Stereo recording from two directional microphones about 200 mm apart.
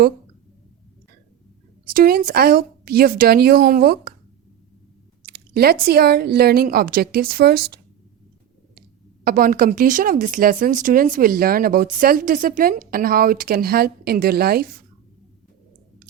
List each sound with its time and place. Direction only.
1.9 s a woman's voice: 45° right (ahead or behind)
5.2 s a woman's voice: 50° right (ahead or behind)
9.2 s a woman's voice: 45° right (ahead or behind)